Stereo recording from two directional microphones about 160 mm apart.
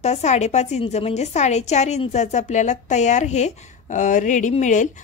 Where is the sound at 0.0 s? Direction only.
45° left (ahead or behind).